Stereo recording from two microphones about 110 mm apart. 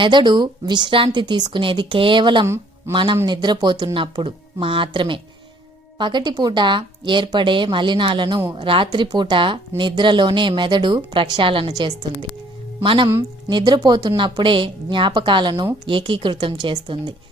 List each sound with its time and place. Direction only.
0.0 s speech: 45° right (ahead or behind)
12.8 s speech: 50° right (ahead or behind)
13.5 s speech: 40° right (ahead or behind)